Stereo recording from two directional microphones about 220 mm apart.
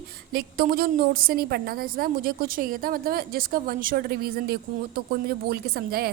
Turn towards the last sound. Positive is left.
turn(degrees=-45)  # may be behind; listen again after turning